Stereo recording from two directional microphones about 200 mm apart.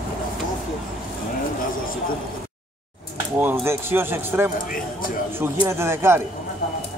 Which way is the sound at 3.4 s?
10° right (ahead or behind).